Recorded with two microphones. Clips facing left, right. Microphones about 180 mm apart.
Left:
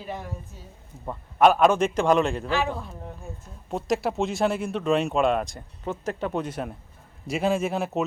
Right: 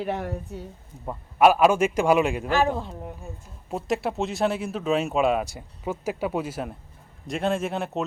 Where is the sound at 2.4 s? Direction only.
45° right (ahead or behind).